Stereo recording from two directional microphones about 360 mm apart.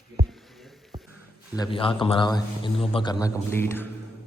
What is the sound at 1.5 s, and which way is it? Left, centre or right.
A man's voice, centre.